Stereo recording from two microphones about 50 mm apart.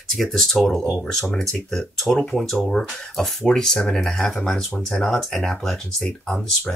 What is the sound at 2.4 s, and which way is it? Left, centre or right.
Speech, centre.